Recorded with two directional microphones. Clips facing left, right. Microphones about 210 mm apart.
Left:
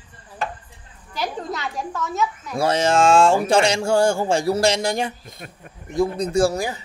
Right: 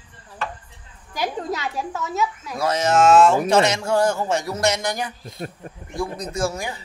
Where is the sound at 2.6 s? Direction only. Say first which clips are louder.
Left 1 dB; 30° left (ahead or behind).